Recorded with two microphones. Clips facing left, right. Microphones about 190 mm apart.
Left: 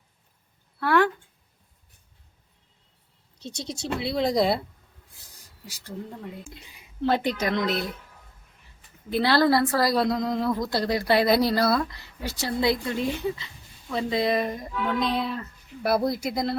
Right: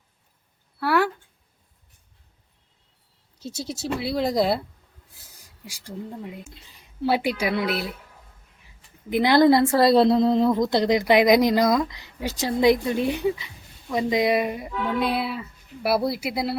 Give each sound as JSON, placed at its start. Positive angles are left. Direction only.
{"t": 0.8, "sound": "speech", "side_deg": -10}
{"t": 3.4, "sound": "speech", "side_deg": -5}
{"t": 5.6, "sound": "speech", "side_deg": -10}
{"t": 6.4, "sound": "speech", "side_deg": 10}
{"t": 7.0, "sound": "speech", "side_deg": -10}
{"t": 9.0, "sound": "speech", "side_deg": -15}